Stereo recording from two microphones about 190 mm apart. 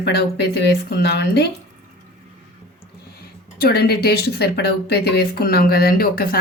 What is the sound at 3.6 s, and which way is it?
Speech, 55° left (ahead or behind).